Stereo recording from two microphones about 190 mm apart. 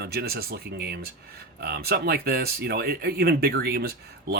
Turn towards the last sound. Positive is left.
turn(degrees=-55)  # may be behind; listen again after turning